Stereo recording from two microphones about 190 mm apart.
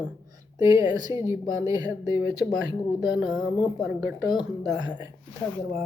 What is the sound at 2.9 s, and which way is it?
A man's voice, 5° right (ahead or behind).